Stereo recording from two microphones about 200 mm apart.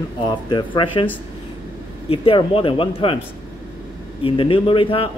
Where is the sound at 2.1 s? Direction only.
25° left (ahead or behind).